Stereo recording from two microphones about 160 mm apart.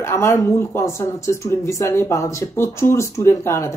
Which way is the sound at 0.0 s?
20° left (ahead or behind).